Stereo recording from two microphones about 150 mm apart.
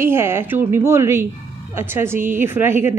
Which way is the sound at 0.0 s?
15° right (ahead or behind).